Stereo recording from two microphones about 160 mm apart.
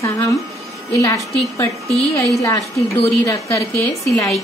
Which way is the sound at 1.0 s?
20° left (ahead or behind).